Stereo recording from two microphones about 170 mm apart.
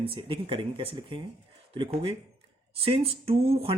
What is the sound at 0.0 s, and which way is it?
Speech, 30° right (ahead or behind).